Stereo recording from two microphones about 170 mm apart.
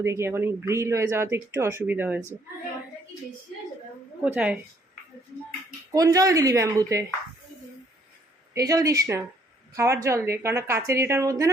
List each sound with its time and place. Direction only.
0.0 s speech: 15° right (ahead or behind)
4.2 s speech: 10° right (ahead or behind)
5.9 s a man's voice: 20° right (ahead or behind)
8.5 s a man's voice: 20° right (ahead or behind)